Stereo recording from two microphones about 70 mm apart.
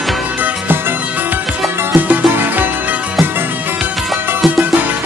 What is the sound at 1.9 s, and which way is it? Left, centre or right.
Music, right.